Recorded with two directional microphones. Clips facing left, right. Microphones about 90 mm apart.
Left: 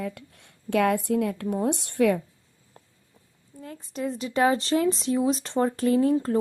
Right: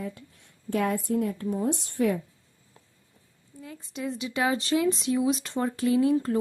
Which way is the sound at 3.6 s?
45° left (ahead or behind).